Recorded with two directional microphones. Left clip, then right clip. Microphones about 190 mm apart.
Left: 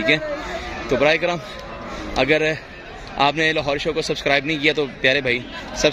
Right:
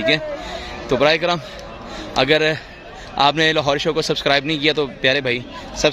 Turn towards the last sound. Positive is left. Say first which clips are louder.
# right 1 dB
turn(degrees=-15)  # may be behind; listen again after turning